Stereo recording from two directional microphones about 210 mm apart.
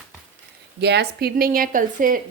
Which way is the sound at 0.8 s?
50° right (ahead or behind).